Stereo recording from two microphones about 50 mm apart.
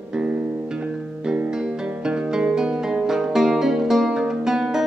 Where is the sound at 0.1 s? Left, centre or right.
Centre.